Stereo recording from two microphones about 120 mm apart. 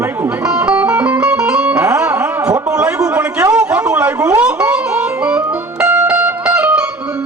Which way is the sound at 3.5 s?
10° right (ahead or behind).